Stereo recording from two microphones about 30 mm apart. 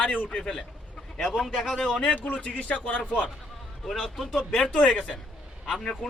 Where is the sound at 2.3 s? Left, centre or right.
Left.